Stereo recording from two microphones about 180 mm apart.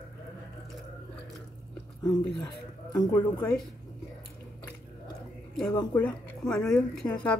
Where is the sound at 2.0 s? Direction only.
20° left (ahead or behind).